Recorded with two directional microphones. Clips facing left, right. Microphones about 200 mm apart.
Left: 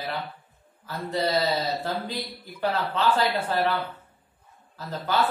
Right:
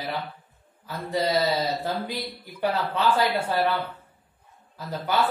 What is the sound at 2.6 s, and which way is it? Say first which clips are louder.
Speech: right 1 dB; 15° right (ahead or behind).